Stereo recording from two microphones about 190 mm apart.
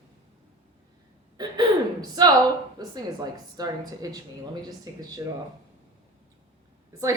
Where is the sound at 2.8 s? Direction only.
20° right (ahead or behind).